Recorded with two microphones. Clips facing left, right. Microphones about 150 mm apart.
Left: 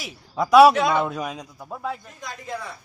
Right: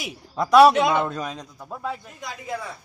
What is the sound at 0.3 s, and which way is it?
A man's voice, centre (ahead or behind).